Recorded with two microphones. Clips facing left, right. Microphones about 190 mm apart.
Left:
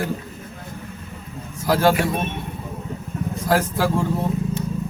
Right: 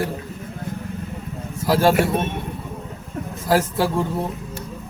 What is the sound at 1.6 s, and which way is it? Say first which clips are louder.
Speech: right 1 dB; centre (ahead or behind).